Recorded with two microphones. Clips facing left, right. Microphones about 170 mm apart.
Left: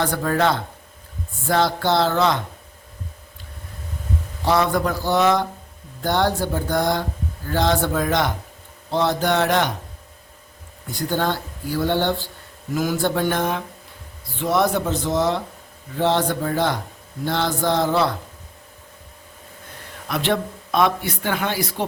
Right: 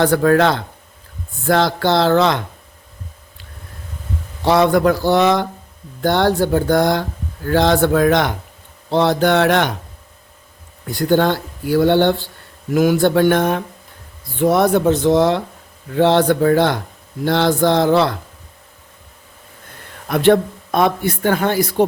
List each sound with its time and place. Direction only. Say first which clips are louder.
0.0 s speech: right 7 dB; 65° right (ahead or behind); by 2.4 s 85° right
4.4 s speech: right 6 dB; 70° right (ahead or behind)
8.9 s speech: right 5 dB; 90° right; by 9.7 s 70° right (ahead or behind)
11.1 s speech: right 8 dB; 70° right (ahead or behind)
20.1 s speech: right 9 dB; 50° right (ahead or behind)